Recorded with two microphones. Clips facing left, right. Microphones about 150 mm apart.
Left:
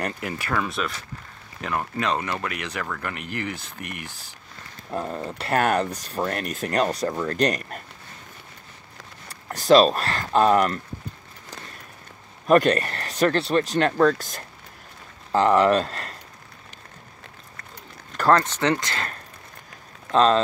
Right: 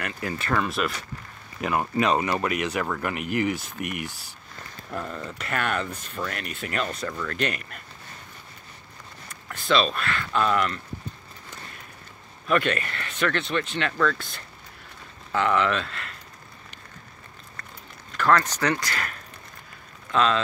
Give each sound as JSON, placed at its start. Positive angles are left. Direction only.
{"t": 0.2, "sound": "speech", "side_deg": 20}
{"t": 0.5, "sound": "speech", "side_deg": 0}
{"t": 1.6, "sound": "speech", "side_deg": -15}
{"t": 4.9, "sound": "speech", "side_deg": 35}
{"t": 9.3, "sound": "speech", "side_deg": 40}
{"t": 12.4, "sound": "speech", "side_deg": 40}
{"t": 18.3, "sound": "speech", "side_deg": 25}
{"t": 20.1, "sound": "speech", "side_deg": 35}